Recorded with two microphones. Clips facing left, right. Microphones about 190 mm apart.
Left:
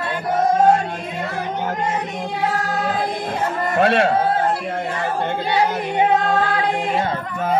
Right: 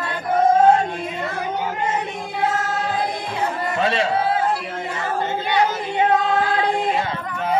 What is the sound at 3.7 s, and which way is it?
Speech, 55° left (ahead or behind).